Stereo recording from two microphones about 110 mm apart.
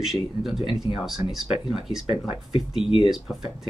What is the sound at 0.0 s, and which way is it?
Speech, 5° right (ahead or behind).